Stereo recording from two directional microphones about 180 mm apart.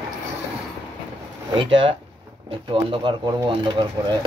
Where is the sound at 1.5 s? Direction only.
30° right (ahead or behind).